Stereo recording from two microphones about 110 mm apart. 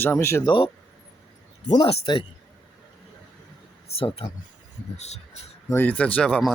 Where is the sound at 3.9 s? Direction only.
60° left (ahead or behind).